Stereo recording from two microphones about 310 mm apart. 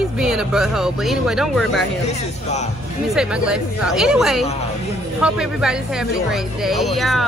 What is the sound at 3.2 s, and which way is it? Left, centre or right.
Speech, centre.